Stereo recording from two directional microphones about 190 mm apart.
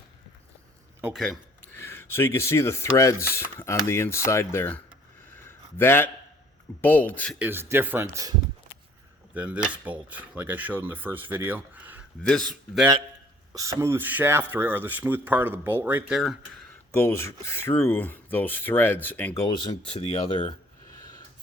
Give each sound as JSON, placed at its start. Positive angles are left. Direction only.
{"t": 1.0, "sound": "speech", "side_deg": 0}
{"t": 1.7, "sound": "speech", "side_deg": 15}
{"t": 5.5, "sound": "a sound", "side_deg": 10}
{"t": 6.8, "sound": "speech", "side_deg": 10}
{"t": 7.3, "sound": "speech", "side_deg": -10}
{"t": 9.3, "sound": "speech", "side_deg": -5}
{"t": 12.2, "sound": "speech", "side_deg": 5}
{"t": 13.5, "sound": "speech", "side_deg": -15}
{"t": 16.9, "sound": "speech", "side_deg": 15}
{"t": 19.3, "sound": "speech", "side_deg": 20}
{"t": 21.0, "sound": "rub", "side_deg": 20}